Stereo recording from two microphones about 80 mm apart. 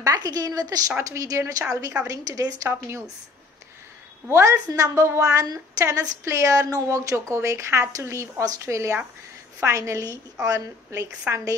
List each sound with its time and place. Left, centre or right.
0.0 s a woman's voice: right
4.3 s a woman's voice: right
11.3 s a woman's voice: right